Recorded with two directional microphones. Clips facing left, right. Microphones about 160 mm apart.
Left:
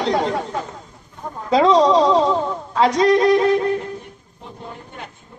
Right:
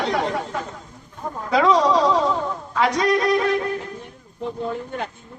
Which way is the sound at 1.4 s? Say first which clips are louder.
Left 3 dB; 25° left (ahead or behind).